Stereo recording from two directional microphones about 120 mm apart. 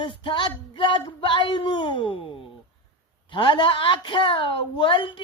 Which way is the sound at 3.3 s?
45° left (ahead or behind).